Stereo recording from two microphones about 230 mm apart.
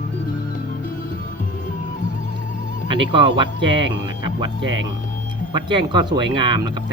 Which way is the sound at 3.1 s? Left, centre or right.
Centre.